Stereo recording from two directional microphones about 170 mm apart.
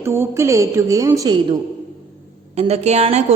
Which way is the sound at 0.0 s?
15° right (ahead or behind).